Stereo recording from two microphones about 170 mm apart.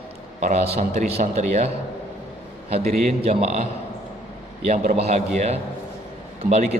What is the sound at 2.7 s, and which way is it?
Speech, 35° right (ahead or behind).